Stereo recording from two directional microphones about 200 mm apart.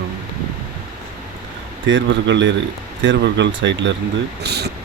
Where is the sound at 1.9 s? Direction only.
65° right (ahead or behind).